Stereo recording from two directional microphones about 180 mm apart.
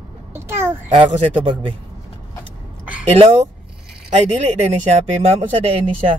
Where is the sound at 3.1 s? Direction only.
40° right (ahead or behind).